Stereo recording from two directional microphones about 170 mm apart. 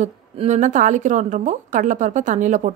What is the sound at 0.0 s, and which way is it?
A woman's voice, 45° right (ahead or behind).